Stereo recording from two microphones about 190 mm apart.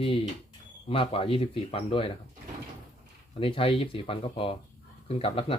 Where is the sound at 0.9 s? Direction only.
30° left (ahead or behind).